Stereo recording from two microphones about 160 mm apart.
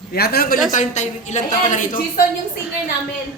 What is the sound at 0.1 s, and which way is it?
Speech, 75° left (ahead or behind).